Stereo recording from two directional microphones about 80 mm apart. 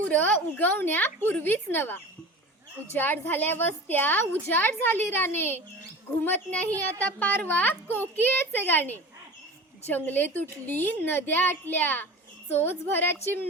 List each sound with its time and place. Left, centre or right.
0.0 s a woman's voice: centre